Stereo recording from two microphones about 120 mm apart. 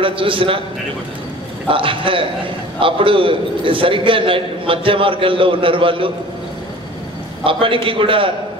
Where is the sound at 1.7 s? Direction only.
45° right (ahead or behind).